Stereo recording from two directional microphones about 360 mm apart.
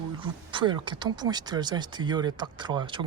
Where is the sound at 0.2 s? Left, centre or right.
Centre.